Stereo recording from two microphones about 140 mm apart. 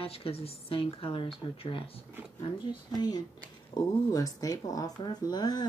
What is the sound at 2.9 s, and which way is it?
A woman's voice, 30° left (ahead or behind).